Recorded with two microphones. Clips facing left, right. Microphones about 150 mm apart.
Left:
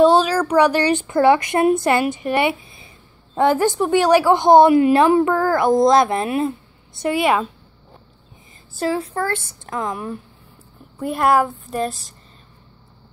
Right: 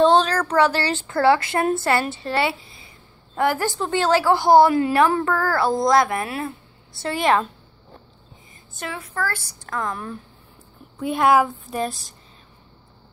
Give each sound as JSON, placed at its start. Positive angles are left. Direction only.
{"t": 0.0, "sound": "a woman's voice", "side_deg": 10}
{"t": 8.7, "sound": "a woman's voice", "side_deg": 30}